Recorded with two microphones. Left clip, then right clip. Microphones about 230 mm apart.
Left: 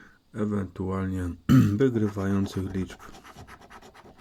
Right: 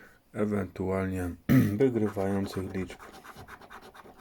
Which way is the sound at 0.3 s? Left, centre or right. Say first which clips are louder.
Even; centre.